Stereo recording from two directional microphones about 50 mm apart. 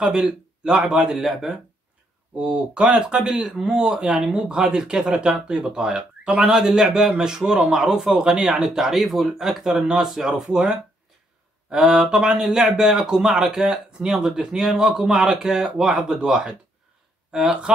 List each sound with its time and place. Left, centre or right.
0.0 s a man's voice: centre
2.3 s speech: centre
11.7 s speech: centre